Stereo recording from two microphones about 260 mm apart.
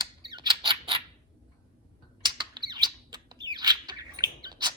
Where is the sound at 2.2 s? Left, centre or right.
Centre.